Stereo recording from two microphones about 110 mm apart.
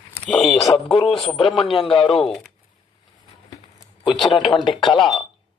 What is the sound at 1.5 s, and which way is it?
Speech, centre (ahead or behind).